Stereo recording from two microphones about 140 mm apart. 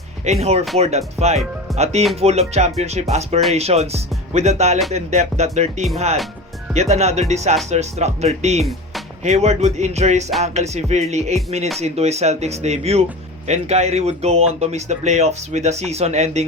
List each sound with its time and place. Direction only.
0.3 s speech: 50° right (ahead or behind)